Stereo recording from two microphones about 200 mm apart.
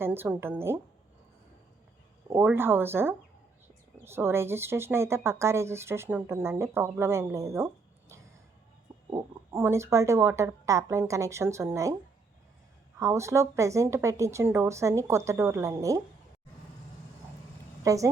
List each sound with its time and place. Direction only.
0.0 s speech: 10° right (ahead or behind)
2.3 s speech: 10° right (ahead or behind)
9.0 s speech: 15° right (ahead or behind)
13.0 s speech: 15° right (ahead or behind)
17.8 s speech: 15° right (ahead or behind)